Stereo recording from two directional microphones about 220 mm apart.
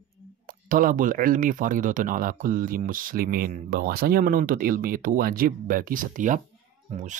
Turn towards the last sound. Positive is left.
turn(degrees=-35)  # may be behind; listen again after turning